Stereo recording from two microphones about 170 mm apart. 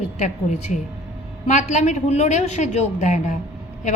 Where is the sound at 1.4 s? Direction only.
45° left (ahead or behind).